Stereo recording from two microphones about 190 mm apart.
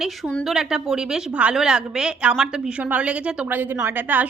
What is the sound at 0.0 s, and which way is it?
A woman's voice, centre (ahead or behind).